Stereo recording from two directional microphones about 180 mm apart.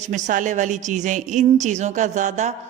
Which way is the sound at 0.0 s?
45° right (ahead or behind).